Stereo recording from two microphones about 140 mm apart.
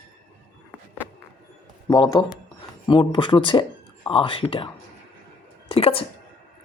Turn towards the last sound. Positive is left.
turn(degrees=40)  # may be behind; listen again after turning